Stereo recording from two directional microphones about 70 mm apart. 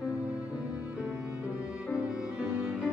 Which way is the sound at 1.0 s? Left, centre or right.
Centre.